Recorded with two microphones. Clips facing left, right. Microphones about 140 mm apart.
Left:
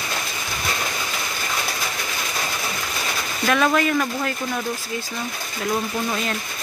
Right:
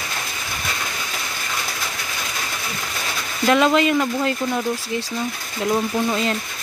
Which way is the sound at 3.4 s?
20° right (ahead or behind).